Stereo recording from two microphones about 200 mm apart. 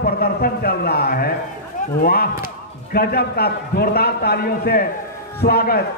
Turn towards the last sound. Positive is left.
turn(degrees=50)  # may be behind; listen again after turning